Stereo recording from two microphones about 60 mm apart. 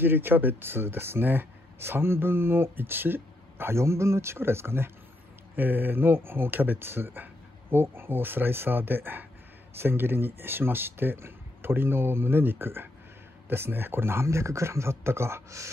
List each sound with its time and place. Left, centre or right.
0.0 s speech: right